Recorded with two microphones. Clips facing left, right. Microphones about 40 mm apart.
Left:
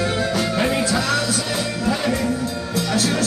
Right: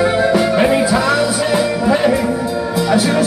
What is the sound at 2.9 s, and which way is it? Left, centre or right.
Music, centre.